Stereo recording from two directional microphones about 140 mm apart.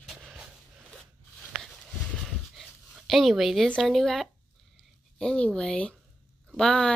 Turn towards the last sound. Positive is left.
turn(degrees=5)  # may be behind; listen again after turning